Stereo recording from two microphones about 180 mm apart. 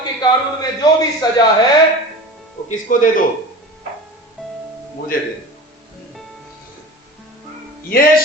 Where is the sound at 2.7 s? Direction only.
50° left (ahead or behind).